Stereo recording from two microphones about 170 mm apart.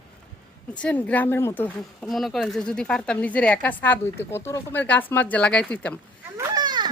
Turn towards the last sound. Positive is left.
turn(degrees=-25)  # may be behind; listen again after turning